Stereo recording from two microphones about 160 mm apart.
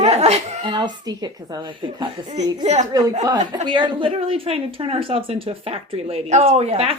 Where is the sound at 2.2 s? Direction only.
45° right (ahead or behind).